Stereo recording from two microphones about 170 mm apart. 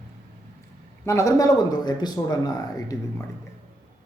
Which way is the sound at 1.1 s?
15° left (ahead or behind).